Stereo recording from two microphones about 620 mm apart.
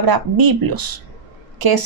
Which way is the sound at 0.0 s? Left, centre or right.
Right.